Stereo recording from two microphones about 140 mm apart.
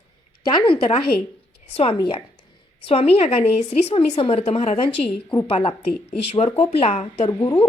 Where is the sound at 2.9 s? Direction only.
45° left (ahead or behind).